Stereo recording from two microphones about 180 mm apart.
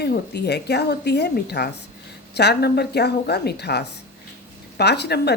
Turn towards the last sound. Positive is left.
turn(degrees=65)  # may be behind; listen again after turning